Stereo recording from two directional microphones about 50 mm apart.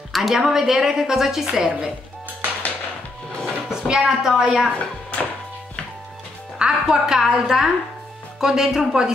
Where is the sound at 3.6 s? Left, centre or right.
Centre.